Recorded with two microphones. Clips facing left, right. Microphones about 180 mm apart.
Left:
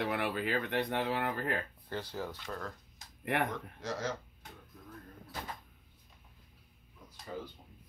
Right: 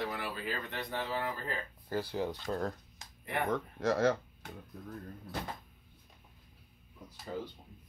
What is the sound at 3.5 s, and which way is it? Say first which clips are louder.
Speech: right 8 dB; 60° right (ahead or behind).